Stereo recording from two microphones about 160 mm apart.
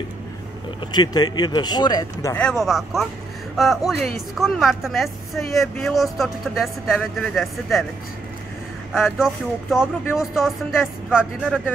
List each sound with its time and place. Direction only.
0.9 s speech: 25° left (ahead or behind)
2.3 s speech: 5° left (ahead or behind)
8.9 s speech: centre (ahead or behind)